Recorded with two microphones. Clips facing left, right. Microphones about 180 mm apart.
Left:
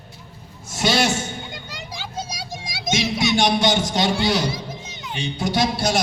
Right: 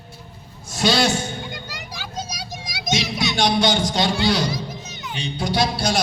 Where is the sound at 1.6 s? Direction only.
25° left (ahead or behind).